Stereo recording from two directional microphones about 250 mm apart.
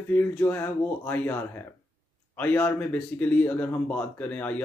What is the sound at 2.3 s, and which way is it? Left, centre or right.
Speech, centre.